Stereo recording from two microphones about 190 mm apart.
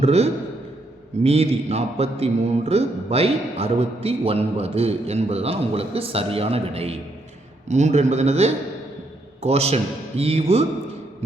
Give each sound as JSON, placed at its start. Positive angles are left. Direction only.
{"t": 0.0, "sound": "a man's voice", "side_deg": -35}